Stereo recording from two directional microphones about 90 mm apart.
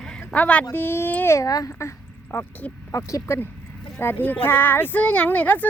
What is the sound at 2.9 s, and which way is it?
Speech, 35° left (ahead or behind).